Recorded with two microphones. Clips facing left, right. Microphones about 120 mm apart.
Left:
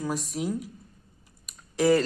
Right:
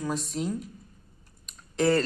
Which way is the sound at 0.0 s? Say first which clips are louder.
Even; 10° left (ahead or behind).